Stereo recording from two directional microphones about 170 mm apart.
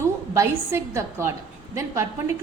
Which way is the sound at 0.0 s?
15° right (ahead or behind).